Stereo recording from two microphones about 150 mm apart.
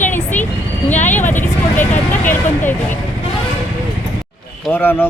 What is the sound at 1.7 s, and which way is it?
A man's voice, 10° left (ahead or behind).